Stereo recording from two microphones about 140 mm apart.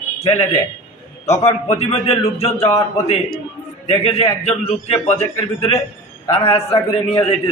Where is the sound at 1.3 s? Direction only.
50° left (ahead or behind).